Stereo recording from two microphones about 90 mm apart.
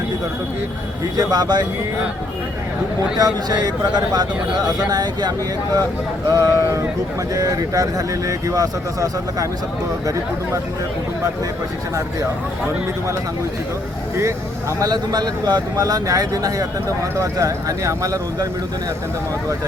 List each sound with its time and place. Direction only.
1.1 s speech: 45° right (ahead or behind)
3.2 s speech: 50° right (ahead or behind)
6.3 s speech: 40° right (ahead or behind)
14.8 s speech: 50° right (ahead or behind)